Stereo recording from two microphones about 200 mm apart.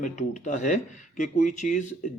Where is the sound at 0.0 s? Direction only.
35° left (ahead or behind).